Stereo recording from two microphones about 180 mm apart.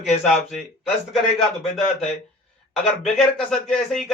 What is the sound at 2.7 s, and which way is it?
Speech, centre (ahead or behind).